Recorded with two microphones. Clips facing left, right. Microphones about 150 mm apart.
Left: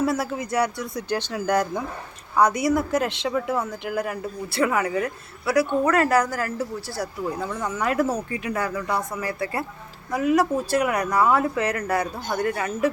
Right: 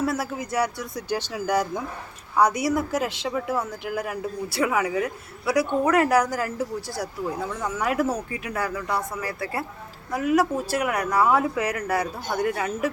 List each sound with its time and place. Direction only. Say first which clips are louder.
0.0 s a woman's voice: left 2 dB; 5° right (ahead or behind)